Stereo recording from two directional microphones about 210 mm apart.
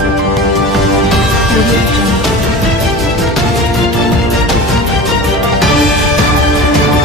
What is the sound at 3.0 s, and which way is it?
Music, centre (ahead or behind).